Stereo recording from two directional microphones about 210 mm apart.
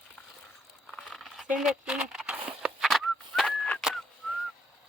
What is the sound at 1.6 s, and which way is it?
Fowl, centre (ahead or behind).